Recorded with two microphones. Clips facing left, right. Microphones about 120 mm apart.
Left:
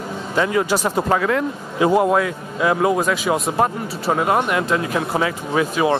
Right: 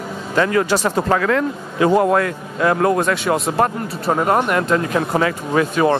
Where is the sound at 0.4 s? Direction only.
10° left (ahead or behind).